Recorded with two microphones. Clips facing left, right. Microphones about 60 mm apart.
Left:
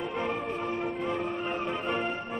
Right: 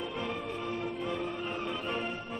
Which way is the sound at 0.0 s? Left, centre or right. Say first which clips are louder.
Left 4 dB; left.